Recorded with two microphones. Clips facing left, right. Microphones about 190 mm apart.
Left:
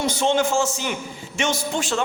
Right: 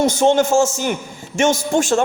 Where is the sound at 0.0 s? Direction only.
45° right (ahead or behind).